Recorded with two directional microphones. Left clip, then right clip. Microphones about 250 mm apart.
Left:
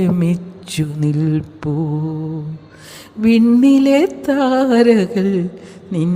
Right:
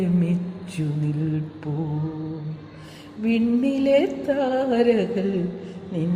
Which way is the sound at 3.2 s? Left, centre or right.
Left.